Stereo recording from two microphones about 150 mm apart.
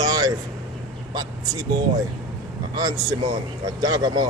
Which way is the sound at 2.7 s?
25° right (ahead or behind).